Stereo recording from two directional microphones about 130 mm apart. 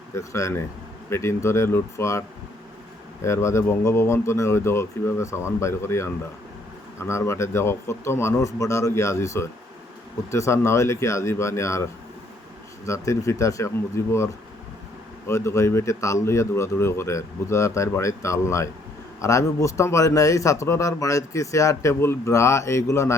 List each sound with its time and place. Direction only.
0.1 s speech: 25° left (ahead or behind)
15.3 s speech: 20° left (ahead or behind)